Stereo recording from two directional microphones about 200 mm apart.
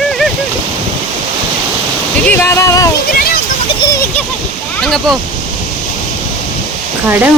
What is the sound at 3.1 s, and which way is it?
Speech, 50° left (ahead or behind).